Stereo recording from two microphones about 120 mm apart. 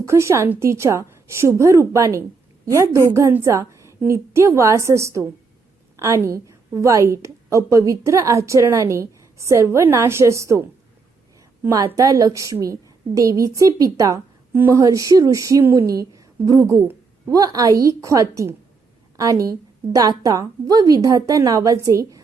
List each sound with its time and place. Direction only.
0.0 s a woman's voice: 25° right (ahead or behind)
11.9 s a woman's voice: 25° right (ahead or behind)